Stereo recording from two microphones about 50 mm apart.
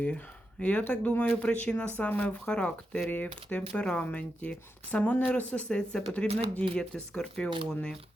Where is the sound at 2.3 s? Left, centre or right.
Left.